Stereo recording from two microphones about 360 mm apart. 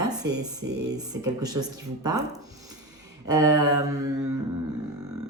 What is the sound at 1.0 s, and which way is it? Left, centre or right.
A woman's voice, centre.